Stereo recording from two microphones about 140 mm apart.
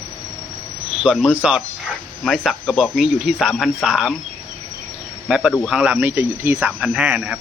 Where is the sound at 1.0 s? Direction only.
Centre (ahead or behind).